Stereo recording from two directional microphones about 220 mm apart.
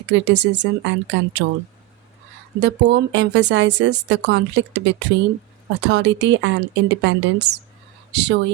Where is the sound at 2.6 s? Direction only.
50° right (ahead or behind).